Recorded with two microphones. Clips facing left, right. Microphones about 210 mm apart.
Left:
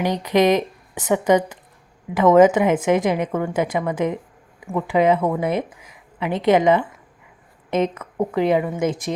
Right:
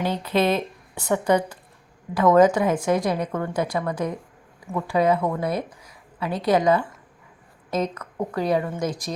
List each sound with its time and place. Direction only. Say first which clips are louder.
0.0 s a woman's voice: left 4 dB; 15° left (ahead or behind)
8.4 s a woman's voice: left 4 dB; 15° left (ahead or behind)